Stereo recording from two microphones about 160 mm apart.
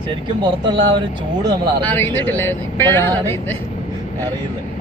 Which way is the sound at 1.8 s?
10° left (ahead or behind).